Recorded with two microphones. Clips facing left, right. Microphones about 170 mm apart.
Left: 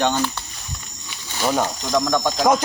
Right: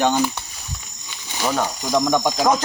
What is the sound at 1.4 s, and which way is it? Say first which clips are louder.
Speech: left 1 dB; 10° left (ahead or behind).